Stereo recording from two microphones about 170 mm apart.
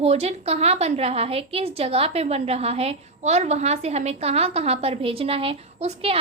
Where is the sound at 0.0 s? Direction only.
40° right (ahead or behind).